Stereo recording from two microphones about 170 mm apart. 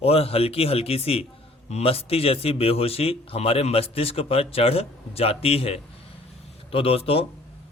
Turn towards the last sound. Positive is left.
turn(degrees=35)  # may be behind; listen again after turning